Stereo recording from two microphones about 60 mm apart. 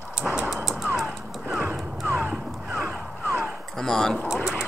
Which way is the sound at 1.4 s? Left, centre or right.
Centre.